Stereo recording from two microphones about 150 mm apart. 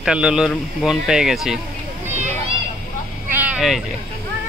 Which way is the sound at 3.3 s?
10° right (ahead or behind).